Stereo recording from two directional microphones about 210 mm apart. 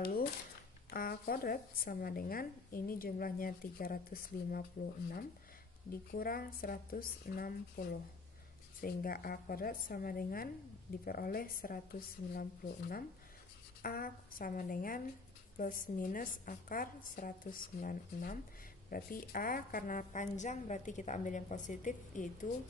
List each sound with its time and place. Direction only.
0.0 s a sound: 45° left (ahead or behind)
0.8 s speech: 45° left (ahead or behind)
5.9 s speech: 45° left (ahead or behind)
8.8 s a woman's voice: 45° left (ahead or behind)